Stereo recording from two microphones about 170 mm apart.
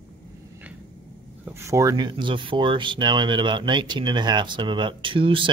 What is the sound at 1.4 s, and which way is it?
Speech, 15° right (ahead or behind).